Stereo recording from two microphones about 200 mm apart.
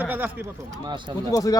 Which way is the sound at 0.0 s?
10° right (ahead or behind).